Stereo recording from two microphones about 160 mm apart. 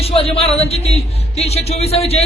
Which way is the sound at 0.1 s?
35° left (ahead or behind).